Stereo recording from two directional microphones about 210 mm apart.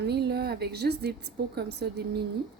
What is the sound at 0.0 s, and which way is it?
A woman's voice, 50° right (ahead or behind).